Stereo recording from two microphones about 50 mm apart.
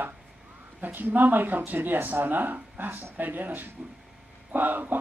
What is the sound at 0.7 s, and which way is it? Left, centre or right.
A man's voice, right.